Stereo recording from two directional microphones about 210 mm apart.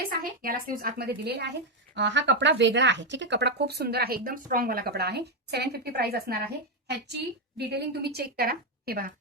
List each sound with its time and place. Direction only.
0.1 s speech: 45° right (ahead or behind)